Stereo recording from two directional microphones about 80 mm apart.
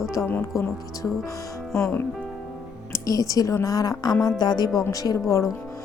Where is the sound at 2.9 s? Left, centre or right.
Left.